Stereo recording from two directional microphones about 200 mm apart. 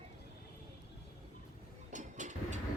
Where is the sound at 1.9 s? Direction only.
35° right (ahead or behind).